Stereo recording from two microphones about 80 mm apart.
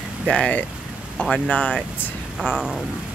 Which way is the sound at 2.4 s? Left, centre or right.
Centre.